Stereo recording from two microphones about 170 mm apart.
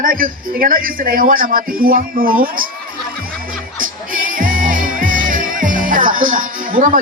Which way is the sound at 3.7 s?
55° right (ahead or behind).